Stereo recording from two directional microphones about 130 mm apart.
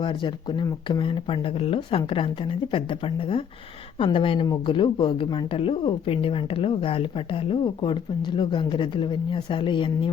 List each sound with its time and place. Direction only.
0.0 s speech: 40° left (ahead or behind)
3.9 s speech: 40° left (ahead or behind)